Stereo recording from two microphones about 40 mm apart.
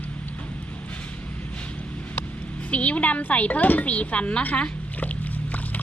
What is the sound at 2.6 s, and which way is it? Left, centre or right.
Speech, left.